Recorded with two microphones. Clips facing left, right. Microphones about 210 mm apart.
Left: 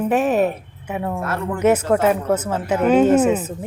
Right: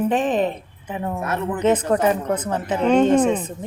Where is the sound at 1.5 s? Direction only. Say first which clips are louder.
Left 2 dB; 10° left (ahead or behind).